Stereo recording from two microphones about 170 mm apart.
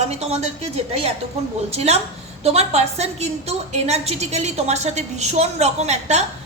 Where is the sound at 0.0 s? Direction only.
40° right (ahead or behind).